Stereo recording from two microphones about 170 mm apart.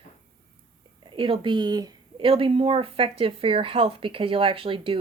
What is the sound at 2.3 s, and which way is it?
Speech, 35° right (ahead or behind).